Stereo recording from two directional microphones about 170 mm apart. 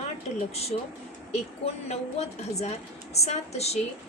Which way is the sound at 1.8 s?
40° left (ahead or behind).